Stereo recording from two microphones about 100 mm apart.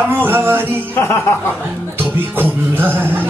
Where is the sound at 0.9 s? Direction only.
25° left (ahead or behind).